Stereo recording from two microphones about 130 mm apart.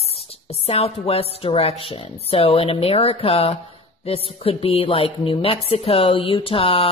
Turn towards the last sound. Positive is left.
turn(degrees=45)  # may be behind; listen again after turning